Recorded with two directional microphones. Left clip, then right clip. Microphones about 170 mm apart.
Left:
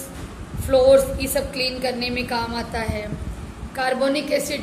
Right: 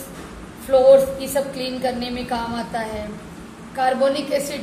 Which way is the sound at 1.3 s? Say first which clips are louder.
Even; 40° left (ahead or behind).